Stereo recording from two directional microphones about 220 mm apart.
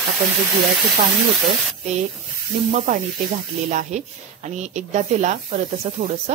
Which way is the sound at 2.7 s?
40° right (ahead or behind).